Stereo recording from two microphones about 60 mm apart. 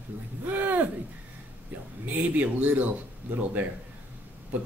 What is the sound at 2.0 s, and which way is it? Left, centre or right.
Speech, right.